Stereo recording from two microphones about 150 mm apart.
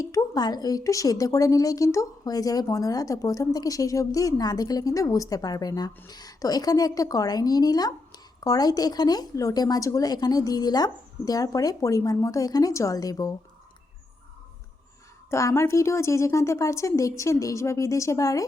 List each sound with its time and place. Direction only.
0.0 s a woman's voice: 25° left (ahead or behind)
15.3 s a woman's voice: 20° left (ahead or behind)